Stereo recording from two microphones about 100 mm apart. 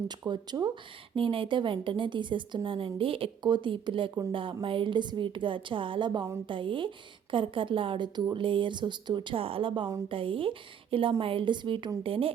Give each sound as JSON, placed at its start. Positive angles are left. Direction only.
{"t": 0.3, "sound": "speech", "side_deg": -45}
{"t": 1.1, "sound": "a woman's voice", "side_deg": -60}
{"t": 12.0, "sound": "a woman's voice", "side_deg": -65}